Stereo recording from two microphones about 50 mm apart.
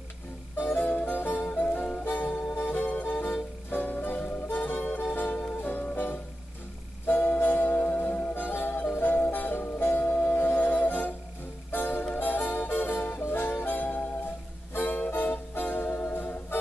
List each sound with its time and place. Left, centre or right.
0.6 s music: left